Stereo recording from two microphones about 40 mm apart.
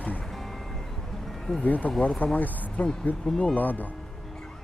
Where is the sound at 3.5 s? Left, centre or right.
Left.